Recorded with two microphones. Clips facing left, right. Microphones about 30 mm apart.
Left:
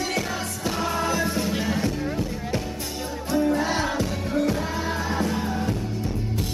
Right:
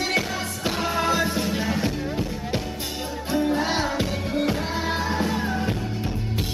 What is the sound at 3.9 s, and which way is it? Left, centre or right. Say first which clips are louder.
Music: even; right.